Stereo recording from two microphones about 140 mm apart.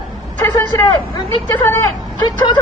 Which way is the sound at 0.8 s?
30° left (ahead or behind).